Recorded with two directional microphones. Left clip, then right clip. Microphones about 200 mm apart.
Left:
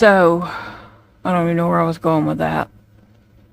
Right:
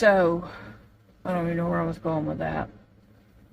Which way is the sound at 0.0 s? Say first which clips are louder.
Left 8 dB; 50° left (ahead or behind).